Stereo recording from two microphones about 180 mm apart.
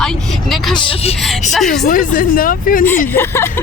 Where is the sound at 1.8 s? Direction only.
50° left (ahead or behind).